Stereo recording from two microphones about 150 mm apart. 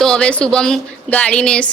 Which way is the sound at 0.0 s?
5° left (ahead or behind).